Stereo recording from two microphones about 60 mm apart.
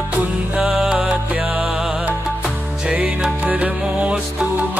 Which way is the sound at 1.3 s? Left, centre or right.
Right.